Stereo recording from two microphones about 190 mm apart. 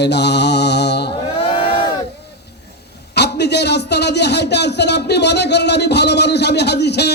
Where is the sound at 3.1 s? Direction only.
60° left (ahead or behind).